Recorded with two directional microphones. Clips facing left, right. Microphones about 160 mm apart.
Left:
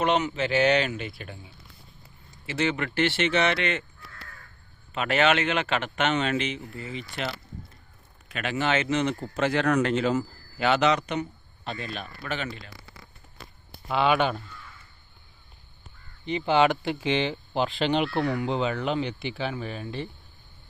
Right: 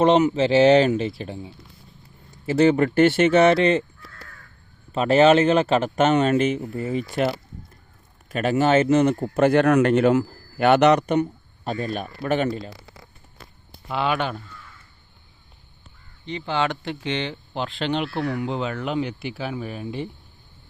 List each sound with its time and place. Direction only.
0.0 s speech: 35° right (ahead or behind)
2.5 s speech: 40° right (ahead or behind)
4.9 s speech: 35° right (ahead or behind)
13.8 s speech: centre (ahead or behind)
16.2 s speech: 10° left (ahead or behind); by 20.1 s 10° right (ahead or behind)